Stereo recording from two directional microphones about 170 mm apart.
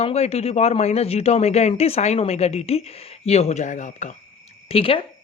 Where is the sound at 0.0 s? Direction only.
35° left (ahead or behind).